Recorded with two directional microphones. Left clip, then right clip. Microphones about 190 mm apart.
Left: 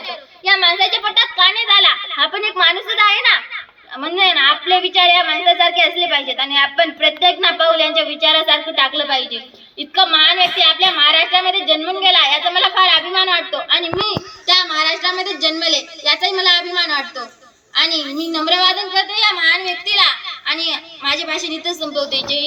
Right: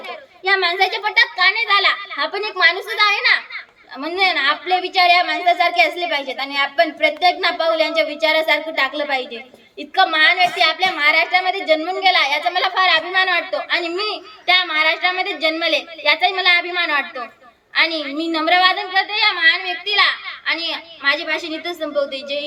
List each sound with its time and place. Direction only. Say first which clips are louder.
0.5 s a woman's voice: left 3 dB; 20° right (ahead or behind)
15.4 s a child's voice: left 2 dB; 40° right (ahead or behind)
18.1 s speech: even; 15° right (ahead or behind)